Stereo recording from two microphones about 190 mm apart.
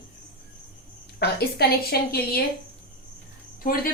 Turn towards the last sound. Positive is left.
turn(degrees=50)  # may be behind; listen again after turning